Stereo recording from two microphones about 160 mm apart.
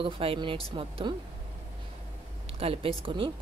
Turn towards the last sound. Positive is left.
turn(degrees=-30)  # may be behind; listen again after turning